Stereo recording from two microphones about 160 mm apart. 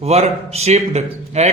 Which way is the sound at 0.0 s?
40° right (ahead or behind).